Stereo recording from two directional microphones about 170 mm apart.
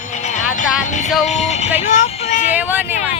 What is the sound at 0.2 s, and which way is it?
Music, 45° left (ahead or behind).